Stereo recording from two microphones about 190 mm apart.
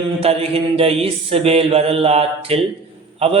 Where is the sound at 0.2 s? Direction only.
30° right (ahead or behind).